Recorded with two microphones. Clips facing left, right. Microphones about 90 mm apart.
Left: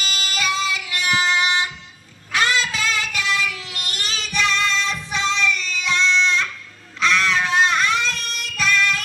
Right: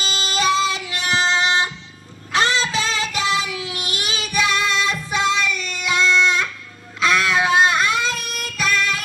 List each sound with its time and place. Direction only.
0.0 s child singing: 25° right (ahead or behind); by 9.0 s 5° right (ahead or behind)